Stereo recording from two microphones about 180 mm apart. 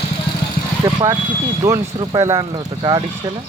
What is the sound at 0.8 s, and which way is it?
Speech, 20° right (ahead or behind).